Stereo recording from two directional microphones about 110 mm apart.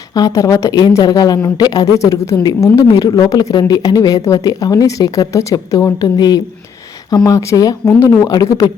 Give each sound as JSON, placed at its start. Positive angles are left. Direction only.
{"t": 0.1, "sound": "speech", "side_deg": 35}